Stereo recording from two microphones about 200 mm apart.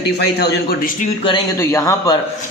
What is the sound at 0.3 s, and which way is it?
Speech, 55° left (ahead or behind).